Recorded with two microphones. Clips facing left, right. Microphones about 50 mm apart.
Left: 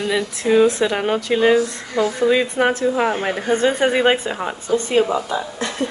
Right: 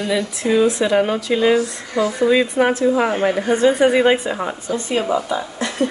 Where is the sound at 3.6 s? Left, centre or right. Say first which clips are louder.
Right 3 dB; left.